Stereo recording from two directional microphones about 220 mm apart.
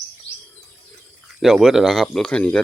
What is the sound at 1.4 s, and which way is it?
Speech, centre (ahead or behind).